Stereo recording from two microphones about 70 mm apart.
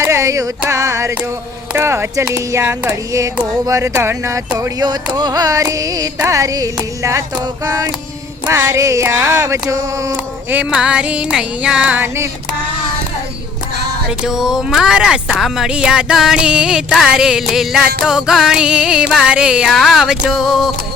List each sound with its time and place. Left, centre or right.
0.0 s carnatic music: right
0.7 s a sound: right
1.7 s music: right
2.9 s a sound: right
5.1 s carnatic music: right
6.2 s a sound: right
10.7 s music: centre
11.9 s music: right
14.3 s music: centre
19.7 s speech: centre